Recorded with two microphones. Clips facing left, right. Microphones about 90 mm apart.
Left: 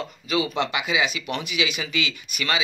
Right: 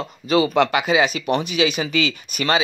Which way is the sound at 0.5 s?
60° right (ahead or behind).